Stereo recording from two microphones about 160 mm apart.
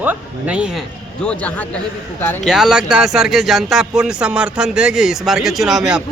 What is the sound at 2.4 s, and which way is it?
Speech, 5° right (ahead or behind).